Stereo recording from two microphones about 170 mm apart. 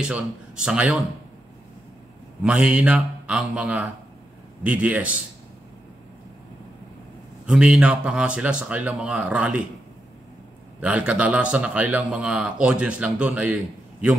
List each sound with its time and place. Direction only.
0.0 s a man's voice: 5° right (ahead or behind)
2.4 s speech: 5° right (ahead or behind)
7.4 s speech: 5° right (ahead or behind)
10.8 s speech: 5° right (ahead or behind)